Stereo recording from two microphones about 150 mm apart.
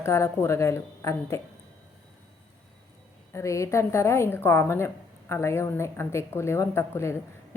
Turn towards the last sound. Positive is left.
turn(degrees=15)  # may be behind; listen again after turning